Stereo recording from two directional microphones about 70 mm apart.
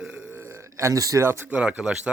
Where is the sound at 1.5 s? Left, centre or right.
Centre.